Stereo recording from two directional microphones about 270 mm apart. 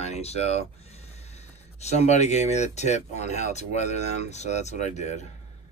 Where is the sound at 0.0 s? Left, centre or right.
Left.